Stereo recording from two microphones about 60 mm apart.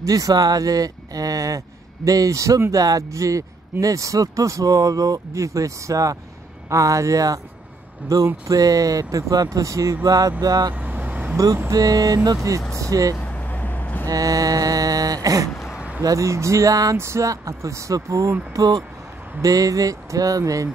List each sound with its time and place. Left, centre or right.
0.0 s speech: right
2.7 s speech: right
8.5 s speech: right
10.0 s vehicle: right
10.7 s vehicle: right
11.7 s vehicle: right
12.5 s speech: right
13.2 s vehicle: left
14.0 s a sound: right
15.7 s a sound: centre
16.0 s speech: right
16.9 s speech: right
18.5 s speech: right